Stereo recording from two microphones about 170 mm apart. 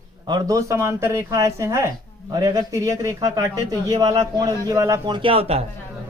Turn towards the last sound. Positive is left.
turn(degrees=-35)  # may be behind; listen again after turning